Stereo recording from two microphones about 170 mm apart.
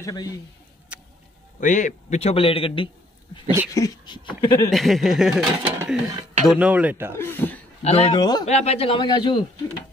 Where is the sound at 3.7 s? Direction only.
25° left (ahead or behind).